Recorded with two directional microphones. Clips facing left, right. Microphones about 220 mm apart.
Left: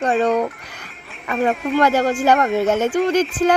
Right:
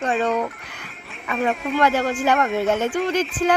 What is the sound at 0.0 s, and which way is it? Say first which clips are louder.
Music: left 4 dB; centre (ahead or behind).